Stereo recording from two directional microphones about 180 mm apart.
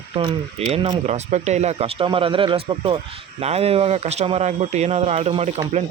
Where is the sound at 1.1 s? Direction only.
40° right (ahead or behind).